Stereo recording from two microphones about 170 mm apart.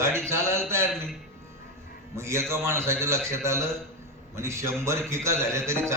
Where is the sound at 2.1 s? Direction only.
15° right (ahead or behind).